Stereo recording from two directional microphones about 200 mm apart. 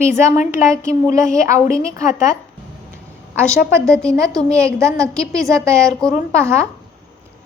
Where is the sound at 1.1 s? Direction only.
15° right (ahead or behind).